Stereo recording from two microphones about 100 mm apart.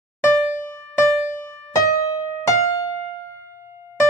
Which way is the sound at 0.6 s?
20° left (ahead or behind).